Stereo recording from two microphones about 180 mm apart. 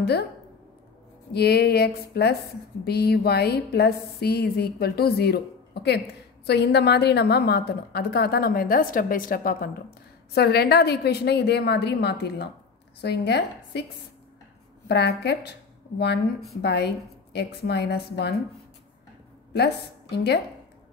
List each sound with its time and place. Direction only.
0.0 s speech: 65° left (ahead or behind)
1.3 s a woman's voice: 60° left (ahead or behind)
14.9 s a woman's voice: 70° left (ahead or behind)
16.6 s a woman's voice: 65° left (ahead or behind)
19.5 s a woman's voice: 65° left (ahead or behind)